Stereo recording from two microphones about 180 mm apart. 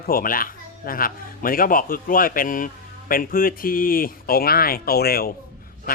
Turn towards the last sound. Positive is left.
turn(degrees=55)  # may be behind; listen again after turning